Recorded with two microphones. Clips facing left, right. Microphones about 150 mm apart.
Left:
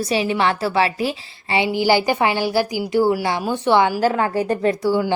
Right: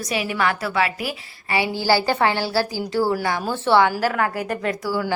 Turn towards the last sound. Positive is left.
turn(degrees=25)  # may be behind; listen again after turning